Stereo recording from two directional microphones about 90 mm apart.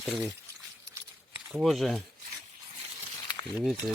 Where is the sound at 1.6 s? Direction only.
Centre (ahead or behind).